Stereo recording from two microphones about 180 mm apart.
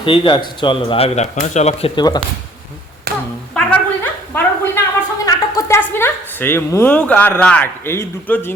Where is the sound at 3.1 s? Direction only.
60° right (ahead or behind).